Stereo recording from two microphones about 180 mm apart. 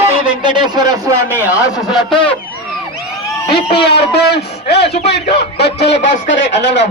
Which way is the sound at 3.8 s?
65° left (ahead or behind).